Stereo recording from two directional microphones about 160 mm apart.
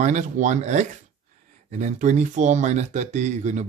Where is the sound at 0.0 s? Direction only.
50° right (ahead or behind).